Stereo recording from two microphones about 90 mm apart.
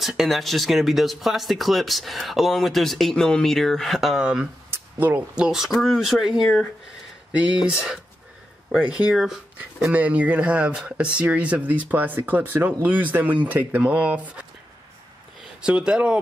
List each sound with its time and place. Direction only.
0.0 s speech: centre (ahead or behind)
4.6 s a sound: 25° right (ahead or behind)
5.3 s speech: 5° right (ahead or behind)
7.6 s speech: 5° right (ahead or behind)
15.6 s speech: 10° right (ahead or behind)